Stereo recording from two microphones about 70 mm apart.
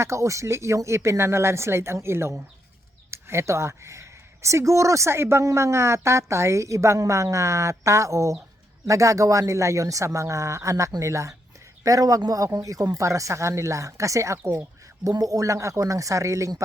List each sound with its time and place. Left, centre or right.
0.0 s a woman's voice: right
11.8 s a woman's voice: right
15.1 s a woman's voice: right